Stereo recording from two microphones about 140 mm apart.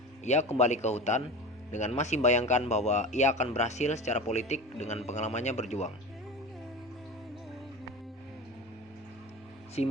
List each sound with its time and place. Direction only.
0.3 s speech: 55° left (ahead or behind)
9.8 s speech: 50° left (ahead or behind)